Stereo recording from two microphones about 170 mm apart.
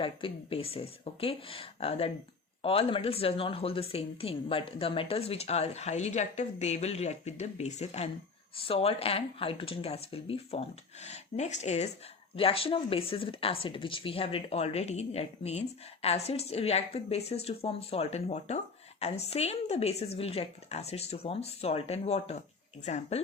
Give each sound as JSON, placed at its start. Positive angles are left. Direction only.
{"t": 0.0, "sound": "speech", "side_deg": 35}